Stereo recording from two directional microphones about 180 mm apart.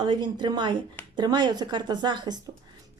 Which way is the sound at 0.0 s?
25° right (ahead or behind).